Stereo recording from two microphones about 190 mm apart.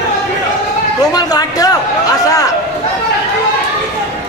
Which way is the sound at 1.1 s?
20° left (ahead or behind).